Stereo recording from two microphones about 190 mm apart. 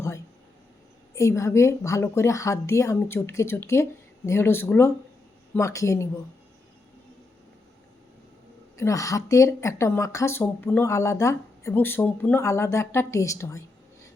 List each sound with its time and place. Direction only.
1.1 s speech: 15° left (ahead or behind)
8.8 s speech: 15° left (ahead or behind)